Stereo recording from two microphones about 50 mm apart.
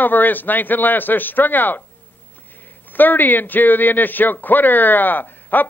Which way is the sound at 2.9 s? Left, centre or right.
Left.